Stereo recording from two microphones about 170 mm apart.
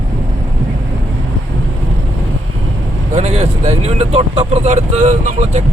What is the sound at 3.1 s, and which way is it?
Speech, 40° right (ahead or behind).